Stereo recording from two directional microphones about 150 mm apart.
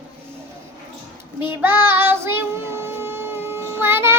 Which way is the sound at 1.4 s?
15° right (ahead or behind).